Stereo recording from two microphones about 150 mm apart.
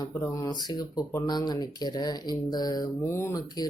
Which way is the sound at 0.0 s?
20° left (ahead or behind).